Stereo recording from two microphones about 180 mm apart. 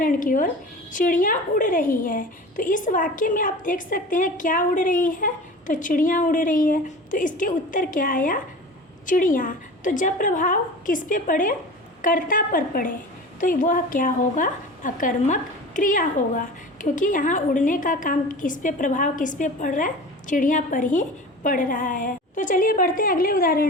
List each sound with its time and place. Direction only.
0.0 s a woman's voice: 50° left (ahead or behind)